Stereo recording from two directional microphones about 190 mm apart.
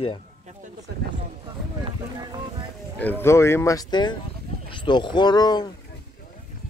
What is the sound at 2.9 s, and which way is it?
Speech, 10° left (ahead or behind).